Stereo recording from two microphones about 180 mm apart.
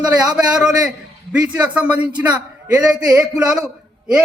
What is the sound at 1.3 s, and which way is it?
Speech, 5° right (ahead or behind).